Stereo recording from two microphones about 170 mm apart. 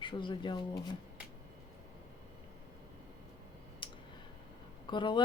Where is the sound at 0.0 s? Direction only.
30° left (ahead or behind).